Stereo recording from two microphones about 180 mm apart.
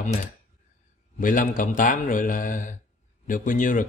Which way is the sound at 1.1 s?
45° left (ahead or behind).